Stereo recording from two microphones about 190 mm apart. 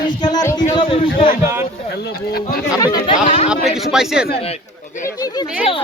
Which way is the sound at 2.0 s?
55° left (ahead or behind).